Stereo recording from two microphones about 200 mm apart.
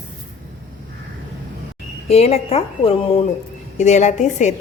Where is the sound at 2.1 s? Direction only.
30° left (ahead or behind).